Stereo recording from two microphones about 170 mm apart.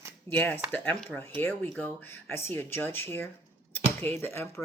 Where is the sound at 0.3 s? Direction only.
10° left (ahead or behind).